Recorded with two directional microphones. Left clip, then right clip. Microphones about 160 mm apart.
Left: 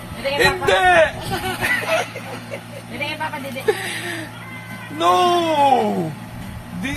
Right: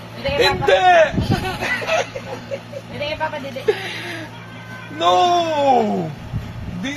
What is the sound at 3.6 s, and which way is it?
Speech, 10° right (ahead or behind).